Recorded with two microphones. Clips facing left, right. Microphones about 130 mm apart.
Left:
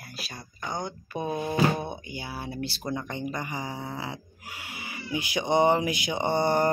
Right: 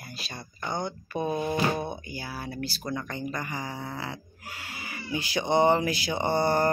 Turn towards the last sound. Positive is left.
turn(degrees=20)  # may be behind; listen again after turning